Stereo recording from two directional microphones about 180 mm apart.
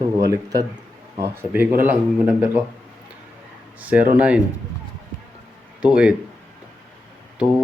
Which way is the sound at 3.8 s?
10° right (ahead or behind).